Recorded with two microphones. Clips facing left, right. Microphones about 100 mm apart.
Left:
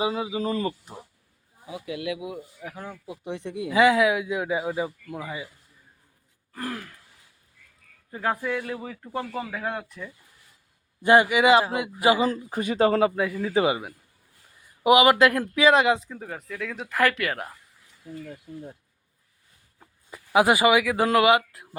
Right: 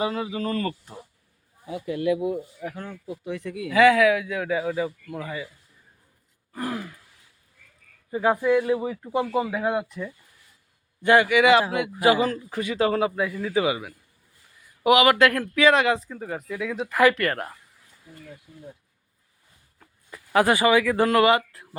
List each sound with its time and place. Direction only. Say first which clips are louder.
0.0 s speech: even; 15° left (ahead or behind)
3.2 s speech: left 1 dB; 25° left (ahead or behind)
6.5 s throat clearing: right 3 dB; 10° right (ahead or behind)
8.1 s speech: right 7 dB; 10° right (ahead or behind)
11.0 s speech: even; 20° left (ahead or behind)
12.7 s speech: left 2 dB; 30° left (ahead or behind)
16.0 s speech: right 4 dB; centre (ahead or behind)
19.8 s speech: even; 15° left (ahead or behind)